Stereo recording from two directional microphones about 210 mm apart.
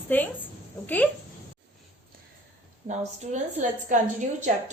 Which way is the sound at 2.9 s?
35° right (ahead or behind).